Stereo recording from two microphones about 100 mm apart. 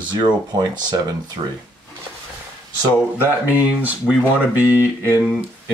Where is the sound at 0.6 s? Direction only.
45° right (ahead or behind).